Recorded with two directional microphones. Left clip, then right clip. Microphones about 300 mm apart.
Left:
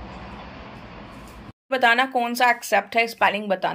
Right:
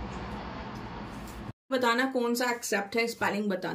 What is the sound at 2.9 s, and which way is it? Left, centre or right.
Speech, left.